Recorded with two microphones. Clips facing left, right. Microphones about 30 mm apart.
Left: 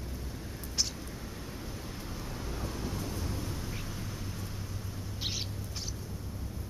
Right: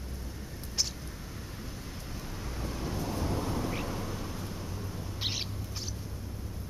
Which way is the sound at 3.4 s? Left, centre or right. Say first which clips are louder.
Right 6 dB; right.